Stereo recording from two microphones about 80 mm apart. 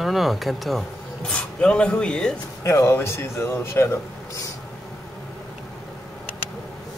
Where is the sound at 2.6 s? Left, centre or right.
Left.